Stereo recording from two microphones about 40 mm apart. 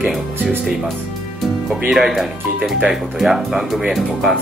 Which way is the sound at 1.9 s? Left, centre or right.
Centre.